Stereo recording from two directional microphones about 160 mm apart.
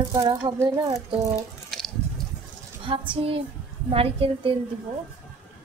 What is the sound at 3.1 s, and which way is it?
A child's voice, 35° right (ahead or behind).